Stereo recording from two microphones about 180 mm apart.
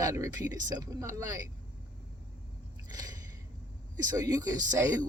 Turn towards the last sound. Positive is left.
turn(degrees=-20)  # may be behind; listen again after turning